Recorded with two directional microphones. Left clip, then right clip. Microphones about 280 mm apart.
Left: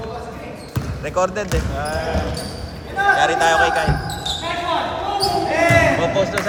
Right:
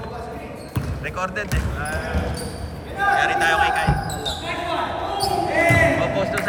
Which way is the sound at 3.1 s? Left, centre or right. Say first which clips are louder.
Left 1 dB; centre.